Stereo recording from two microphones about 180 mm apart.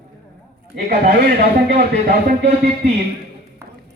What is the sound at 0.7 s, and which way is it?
Speech, 60° right (ahead or behind).